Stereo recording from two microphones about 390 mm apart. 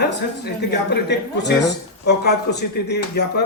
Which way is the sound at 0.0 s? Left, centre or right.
Left.